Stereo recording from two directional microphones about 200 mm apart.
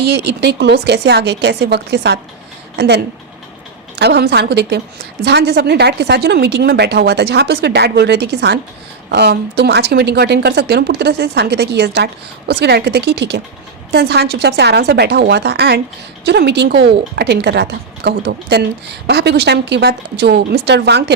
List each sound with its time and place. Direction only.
0.4 s speech: 55° right (ahead or behind)